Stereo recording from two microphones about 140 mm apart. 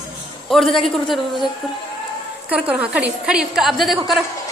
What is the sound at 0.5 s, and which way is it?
Speech, centre (ahead or behind).